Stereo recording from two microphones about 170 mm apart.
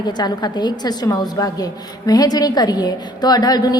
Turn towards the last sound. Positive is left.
turn(degrees=25)  # may be behind; listen again after turning